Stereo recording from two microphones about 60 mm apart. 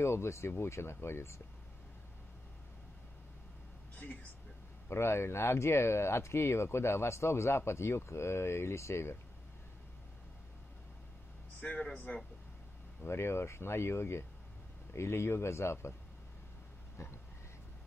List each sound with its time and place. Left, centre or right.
0.0 s speech: left
3.9 s speech: left
4.8 s speech: left
11.6 s speech: left
13.0 s speech: left